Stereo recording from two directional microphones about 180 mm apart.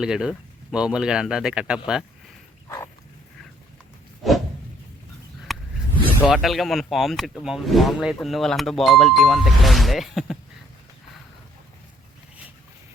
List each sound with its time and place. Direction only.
0.0 s speech: 5° right (ahead or behind)
2.6 s dog: 15° left (ahead or behind)
5.5 s a sound: centre (ahead or behind)
6.2 s speech: centre (ahead or behind)